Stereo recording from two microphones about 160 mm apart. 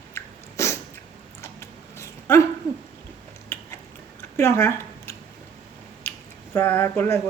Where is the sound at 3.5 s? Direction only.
10° left (ahead or behind).